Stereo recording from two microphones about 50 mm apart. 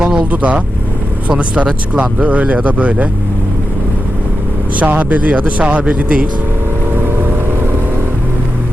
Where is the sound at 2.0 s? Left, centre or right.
Right.